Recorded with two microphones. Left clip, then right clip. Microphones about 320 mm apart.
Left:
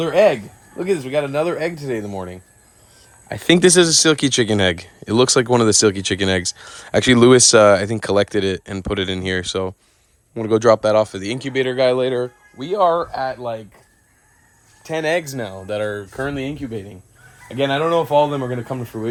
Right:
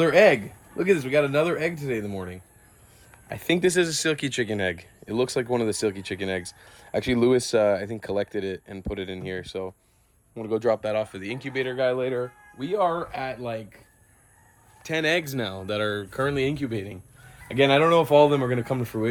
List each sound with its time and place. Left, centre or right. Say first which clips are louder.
0.0 s speech: left 3 dB; centre
3.2 s speech: left 9 dB; left; by 13.7 s centre
14.8 s speech: left 4 dB; centre